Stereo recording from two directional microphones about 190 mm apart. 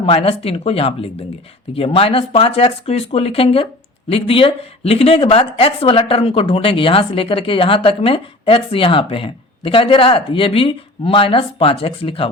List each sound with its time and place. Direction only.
0.0 s speech: 30° left (ahead or behind)